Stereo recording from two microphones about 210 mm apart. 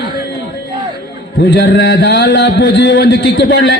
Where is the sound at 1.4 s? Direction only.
55° left (ahead or behind).